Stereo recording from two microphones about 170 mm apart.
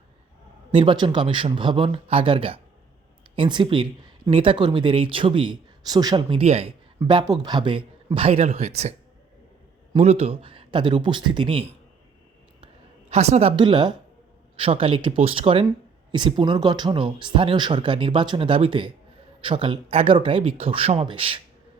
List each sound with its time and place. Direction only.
0.7 s speech: 30° right (ahead or behind)
12.6 s a sound: 40° right (ahead or behind)
13.6 s speech: 25° right (ahead or behind)